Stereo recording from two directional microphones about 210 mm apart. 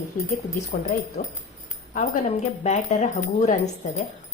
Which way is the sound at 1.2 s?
35° left (ahead or behind).